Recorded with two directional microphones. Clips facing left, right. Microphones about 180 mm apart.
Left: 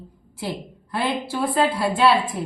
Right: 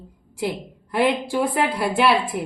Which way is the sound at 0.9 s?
15° right (ahead or behind).